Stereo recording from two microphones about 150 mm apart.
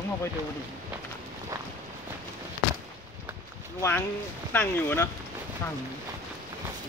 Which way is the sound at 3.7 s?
15° left (ahead or behind).